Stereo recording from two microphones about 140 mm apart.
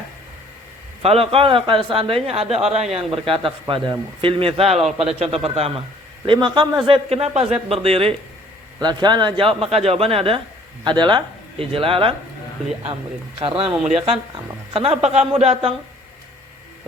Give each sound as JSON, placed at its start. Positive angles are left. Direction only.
{"t": 1.0, "sound": "a man's voice", "side_deg": -45}
{"t": 6.2, "sound": "a man's voice", "side_deg": -35}
{"t": 8.8, "sound": "a man's voice", "side_deg": -30}
{"t": 13.4, "sound": "a man's voice", "side_deg": -40}